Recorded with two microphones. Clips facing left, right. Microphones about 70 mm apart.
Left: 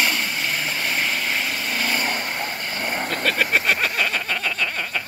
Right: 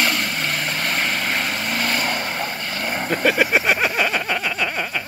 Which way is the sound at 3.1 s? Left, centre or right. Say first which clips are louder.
Right 5 dB; centre.